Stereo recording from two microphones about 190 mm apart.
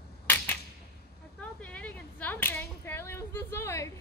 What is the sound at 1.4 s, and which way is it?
Whip, 5° left (ahead or behind).